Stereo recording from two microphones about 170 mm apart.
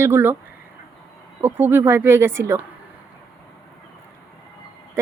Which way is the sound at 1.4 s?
10° right (ahead or behind).